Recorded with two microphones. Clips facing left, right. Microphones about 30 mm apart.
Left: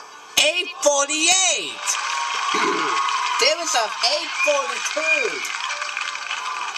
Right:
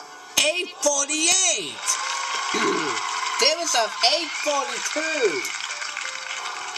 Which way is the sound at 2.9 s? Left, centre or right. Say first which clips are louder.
Left 5 dB; left.